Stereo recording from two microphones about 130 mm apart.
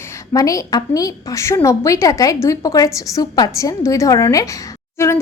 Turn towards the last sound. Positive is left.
turn(degrees=20)  # may be behind; listen again after turning